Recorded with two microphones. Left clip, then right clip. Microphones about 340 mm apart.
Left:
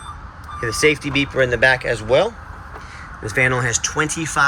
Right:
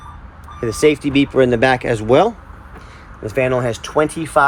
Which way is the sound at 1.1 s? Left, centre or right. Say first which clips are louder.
Right 4 dB; centre.